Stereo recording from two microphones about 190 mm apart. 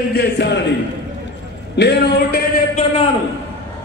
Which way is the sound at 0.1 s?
60° left (ahead or behind).